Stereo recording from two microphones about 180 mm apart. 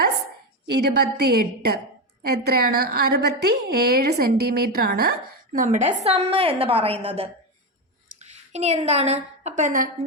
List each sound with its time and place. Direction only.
0.7 s a woman's voice: 65° right (ahead or behind)
5.5 s a woman's voice: 45° right (ahead or behind)
6.0 s a woman's voice: 35° right (ahead or behind)